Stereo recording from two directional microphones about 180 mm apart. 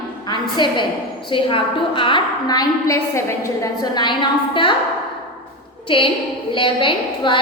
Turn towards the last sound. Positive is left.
turn(degrees=25)  # may be behind; listen again after turning